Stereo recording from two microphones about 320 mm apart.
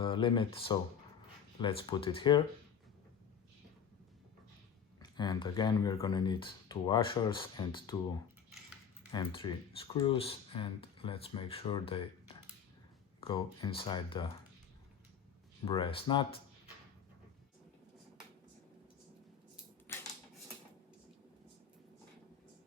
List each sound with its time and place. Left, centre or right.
0.0 s speech: centre
4.9 s speech: centre
9.1 s speech: centre
13.1 s speech: centre
15.6 s speech: centre
19.9 s a sound: centre